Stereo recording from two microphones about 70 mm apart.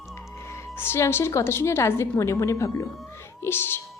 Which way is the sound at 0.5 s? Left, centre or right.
Left.